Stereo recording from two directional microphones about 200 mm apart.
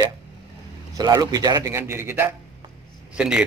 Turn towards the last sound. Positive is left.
turn(degrees=-5)  # may be behind; listen again after turning